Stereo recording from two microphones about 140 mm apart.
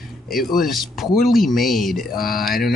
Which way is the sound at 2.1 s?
90° left.